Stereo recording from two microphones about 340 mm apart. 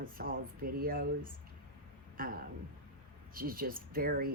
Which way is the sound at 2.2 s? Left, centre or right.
Right.